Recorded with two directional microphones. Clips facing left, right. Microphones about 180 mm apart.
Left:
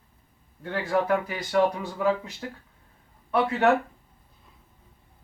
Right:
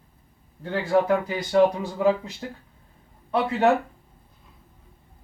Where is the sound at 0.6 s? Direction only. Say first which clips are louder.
Right 4 dB; 25° right (ahead or behind).